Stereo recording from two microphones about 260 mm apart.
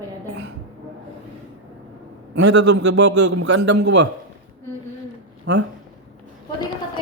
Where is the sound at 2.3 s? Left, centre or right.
Right.